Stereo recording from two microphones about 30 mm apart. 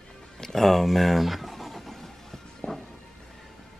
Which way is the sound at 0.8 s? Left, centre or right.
Centre.